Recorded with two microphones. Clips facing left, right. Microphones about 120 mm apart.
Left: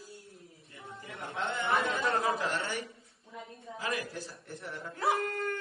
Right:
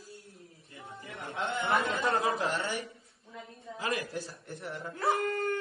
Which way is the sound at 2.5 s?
Centre (ahead or behind).